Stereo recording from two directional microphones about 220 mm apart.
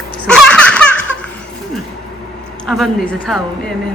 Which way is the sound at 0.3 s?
5° left (ahead or behind).